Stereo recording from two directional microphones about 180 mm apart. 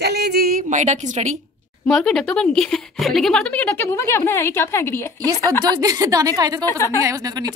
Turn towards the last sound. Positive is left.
turn(degrees=-20)  # may be behind; listen again after turning